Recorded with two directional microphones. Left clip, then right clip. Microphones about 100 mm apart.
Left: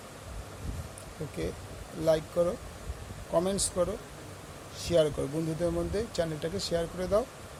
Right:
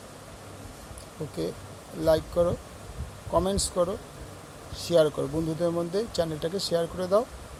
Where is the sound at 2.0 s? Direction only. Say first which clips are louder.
Right 3 dB; 25° right (ahead or behind).